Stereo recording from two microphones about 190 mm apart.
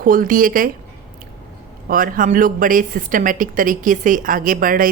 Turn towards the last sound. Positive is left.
turn(degrees=-45)  # may be behind; listen again after turning